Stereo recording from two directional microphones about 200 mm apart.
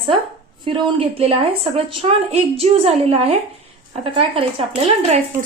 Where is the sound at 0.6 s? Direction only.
25° right (ahead or behind).